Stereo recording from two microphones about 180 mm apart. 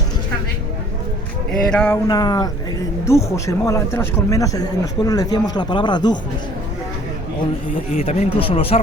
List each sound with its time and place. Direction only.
1.7 s a sound: 10° left (ahead or behind)
2.0 s speech: 20° left (ahead or behind)
8.0 s speech: 35° left (ahead or behind)